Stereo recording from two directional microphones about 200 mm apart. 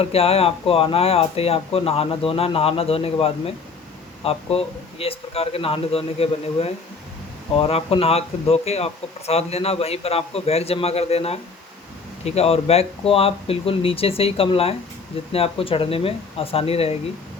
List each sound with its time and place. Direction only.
0.0 s speech: 30° left (ahead or behind)